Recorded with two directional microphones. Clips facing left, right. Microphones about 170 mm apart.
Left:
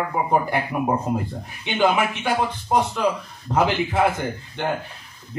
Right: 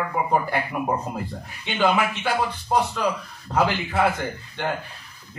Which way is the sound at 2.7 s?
15° left (ahead or behind).